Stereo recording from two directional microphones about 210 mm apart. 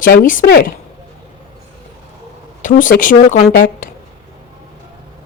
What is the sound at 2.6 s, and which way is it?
Speech, 40° left (ahead or behind).